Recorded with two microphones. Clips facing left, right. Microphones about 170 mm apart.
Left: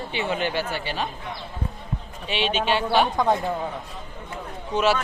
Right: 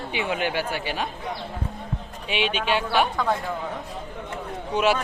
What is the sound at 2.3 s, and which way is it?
Speech, 10° right (ahead or behind).